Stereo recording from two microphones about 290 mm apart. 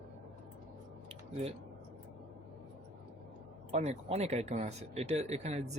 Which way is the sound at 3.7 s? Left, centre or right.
Right.